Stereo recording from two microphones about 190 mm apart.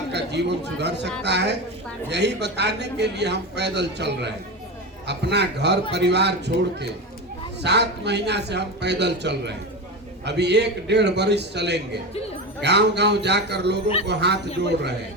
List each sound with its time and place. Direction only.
0.1 s a man's voice: 65° right (ahead or behind)